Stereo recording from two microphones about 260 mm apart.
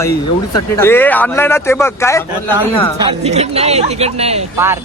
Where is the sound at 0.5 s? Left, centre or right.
Centre.